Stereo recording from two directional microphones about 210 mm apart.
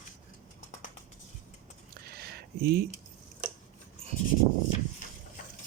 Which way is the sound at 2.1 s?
50° right (ahead or behind).